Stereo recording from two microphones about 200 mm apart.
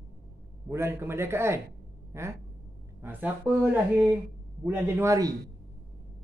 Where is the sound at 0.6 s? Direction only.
10° right (ahead or behind).